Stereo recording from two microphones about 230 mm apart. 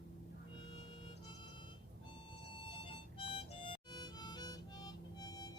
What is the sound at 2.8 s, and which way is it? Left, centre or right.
Harmonica, left.